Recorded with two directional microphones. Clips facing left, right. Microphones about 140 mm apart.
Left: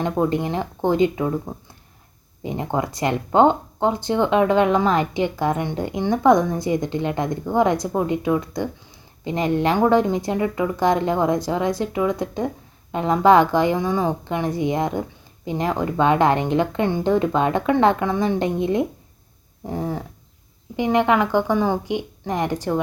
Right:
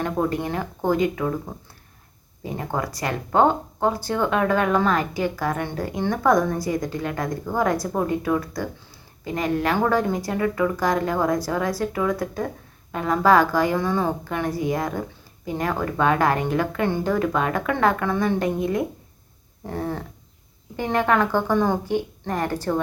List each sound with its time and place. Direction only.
0.0 s speech: 20° left (ahead or behind)
2.4 s speech: 20° left (ahead or behind)
19.6 s speech: 15° left (ahead or behind)